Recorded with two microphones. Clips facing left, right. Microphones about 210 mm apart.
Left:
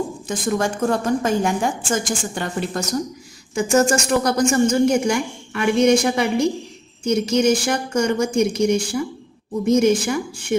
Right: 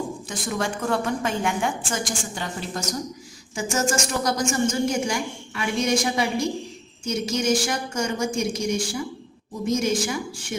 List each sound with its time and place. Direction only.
0.3 s a woman's voice: 45° left (ahead or behind)